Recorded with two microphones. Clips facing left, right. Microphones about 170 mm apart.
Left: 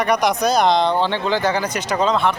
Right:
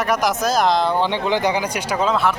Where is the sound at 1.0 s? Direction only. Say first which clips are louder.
Even; 15° right (ahead or behind).